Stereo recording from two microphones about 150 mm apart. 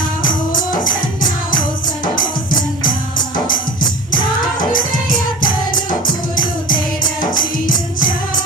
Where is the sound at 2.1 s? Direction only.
65° left (ahead or behind).